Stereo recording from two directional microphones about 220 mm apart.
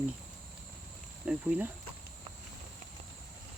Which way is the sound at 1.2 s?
5° right (ahead or behind).